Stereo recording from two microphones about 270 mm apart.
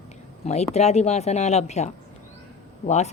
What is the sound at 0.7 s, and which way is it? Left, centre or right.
Speech, left.